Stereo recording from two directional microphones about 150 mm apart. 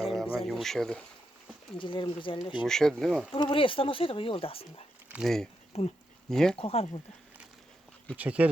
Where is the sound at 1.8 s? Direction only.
35° left (ahead or behind).